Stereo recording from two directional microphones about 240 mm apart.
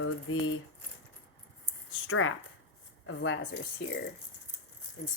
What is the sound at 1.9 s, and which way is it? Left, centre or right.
Speech, left.